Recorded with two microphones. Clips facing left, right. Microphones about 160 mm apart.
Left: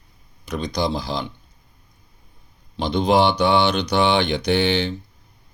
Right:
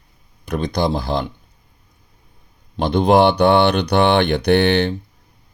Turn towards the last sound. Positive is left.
turn(degrees=-60)  # may be behind; listen again after turning